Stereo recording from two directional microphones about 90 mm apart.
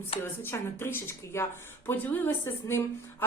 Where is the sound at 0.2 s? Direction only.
25° left (ahead or behind).